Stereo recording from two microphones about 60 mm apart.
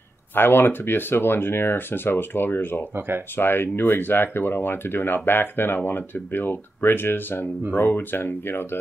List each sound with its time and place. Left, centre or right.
0.3 s speech: left